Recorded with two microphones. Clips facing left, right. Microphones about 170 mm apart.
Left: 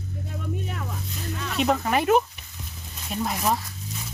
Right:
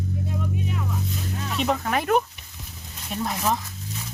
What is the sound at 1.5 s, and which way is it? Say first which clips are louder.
Speech: left 2 dB; 5° left (ahead or behind).